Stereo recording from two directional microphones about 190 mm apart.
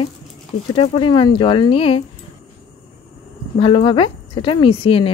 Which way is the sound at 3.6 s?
30° left (ahead or behind).